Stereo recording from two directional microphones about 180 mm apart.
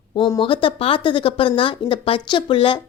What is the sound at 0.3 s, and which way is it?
Speech, 30° left (ahead or behind).